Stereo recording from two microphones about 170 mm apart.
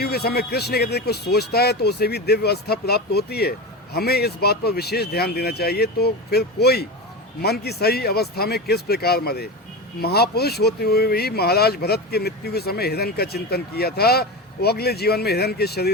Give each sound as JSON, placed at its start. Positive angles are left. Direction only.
{"t": 0.0, "sound": "speech", "side_deg": 65}